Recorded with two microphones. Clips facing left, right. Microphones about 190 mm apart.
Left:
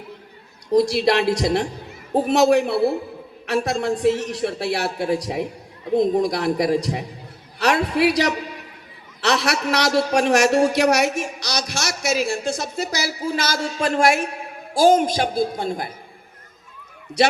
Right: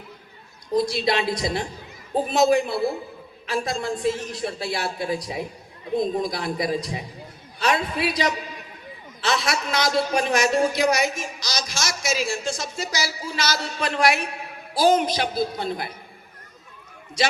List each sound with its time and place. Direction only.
0.7 s a man's voice: 70° left (ahead or behind); by 15.9 s 50° left (ahead or behind)